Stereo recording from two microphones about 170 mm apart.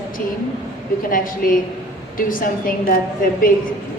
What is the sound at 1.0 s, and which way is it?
A woman's voice, 55° left (ahead or behind).